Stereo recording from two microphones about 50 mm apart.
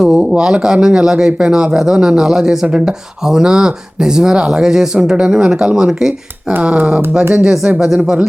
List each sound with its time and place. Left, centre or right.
0.0 s speech: centre
6.6 s speech: right